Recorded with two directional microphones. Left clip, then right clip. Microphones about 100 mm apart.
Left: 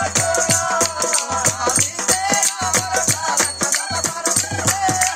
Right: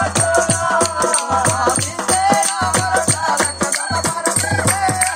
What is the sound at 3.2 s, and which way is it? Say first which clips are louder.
Music: right 3 dB; 10° left (ahead or behind).